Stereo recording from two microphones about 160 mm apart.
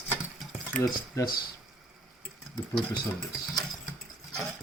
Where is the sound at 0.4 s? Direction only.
Centre (ahead or behind).